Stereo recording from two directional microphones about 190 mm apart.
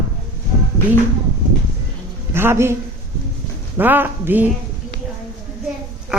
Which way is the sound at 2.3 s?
15° right (ahead or behind).